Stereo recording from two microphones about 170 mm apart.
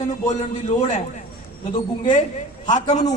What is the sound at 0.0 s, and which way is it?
A man's voice, 45° left (ahead or behind).